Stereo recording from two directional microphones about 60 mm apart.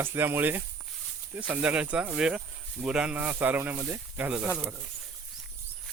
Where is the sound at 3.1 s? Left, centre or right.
Right.